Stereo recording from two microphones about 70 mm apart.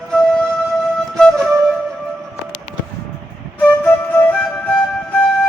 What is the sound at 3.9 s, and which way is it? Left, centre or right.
Flute, left.